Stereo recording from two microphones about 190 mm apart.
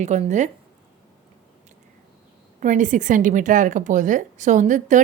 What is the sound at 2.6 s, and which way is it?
A woman's voice, 40° right (ahead or behind).